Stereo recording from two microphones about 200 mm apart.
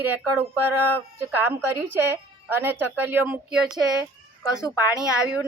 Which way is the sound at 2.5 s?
10° right (ahead or behind).